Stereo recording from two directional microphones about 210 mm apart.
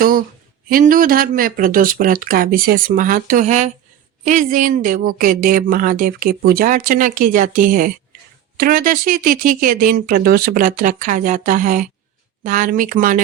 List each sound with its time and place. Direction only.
0.0 s speech: 45° right (ahead or behind)